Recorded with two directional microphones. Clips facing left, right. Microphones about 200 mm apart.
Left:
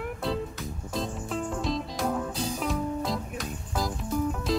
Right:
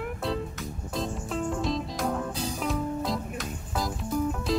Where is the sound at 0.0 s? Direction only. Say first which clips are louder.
Even; centre (ahead or behind).